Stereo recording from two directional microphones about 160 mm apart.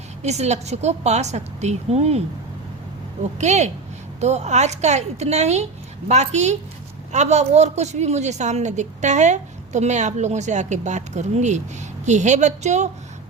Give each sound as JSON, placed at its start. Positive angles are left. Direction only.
{"t": 0.2, "sound": "a woman's voice", "side_deg": -45}
{"t": 3.3, "sound": "a woman's voice", "side_deg": -45}